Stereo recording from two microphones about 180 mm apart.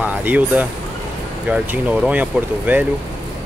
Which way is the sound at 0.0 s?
10° right (ahead or behind).